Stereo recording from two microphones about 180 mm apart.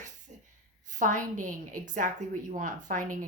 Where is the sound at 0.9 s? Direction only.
45° right (ahead or behind).